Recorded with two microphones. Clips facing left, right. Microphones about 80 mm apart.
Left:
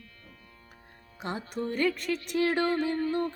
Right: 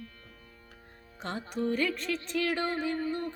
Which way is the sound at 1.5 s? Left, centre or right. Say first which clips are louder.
Right 4 dB; left.